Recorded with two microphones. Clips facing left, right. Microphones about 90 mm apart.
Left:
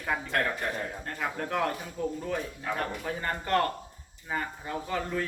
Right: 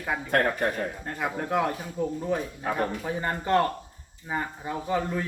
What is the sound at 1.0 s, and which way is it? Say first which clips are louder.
Speech: right 3 dB; 10° right (ahead or behind).